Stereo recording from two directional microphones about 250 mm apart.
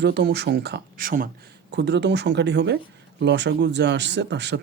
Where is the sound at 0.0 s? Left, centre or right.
Right.